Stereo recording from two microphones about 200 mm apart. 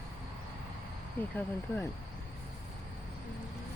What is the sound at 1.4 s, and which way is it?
Speech, 10° left (ahead or behind).